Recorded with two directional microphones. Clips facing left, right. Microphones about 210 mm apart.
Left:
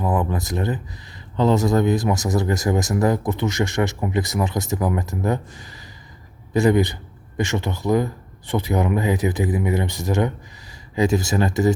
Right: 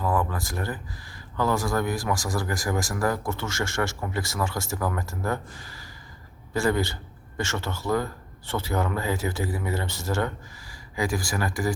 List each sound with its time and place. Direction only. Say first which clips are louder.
0.0 s a man's voice: left 4 dB; 20° left (ahead or behind)